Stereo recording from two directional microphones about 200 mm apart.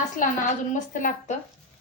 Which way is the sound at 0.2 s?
40° left (ahead or behind).